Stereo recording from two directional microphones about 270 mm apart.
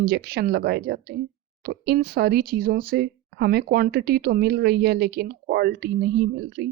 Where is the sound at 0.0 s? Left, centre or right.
Right.